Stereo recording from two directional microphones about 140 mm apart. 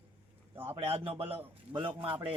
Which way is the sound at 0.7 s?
45° right (ahead or behind).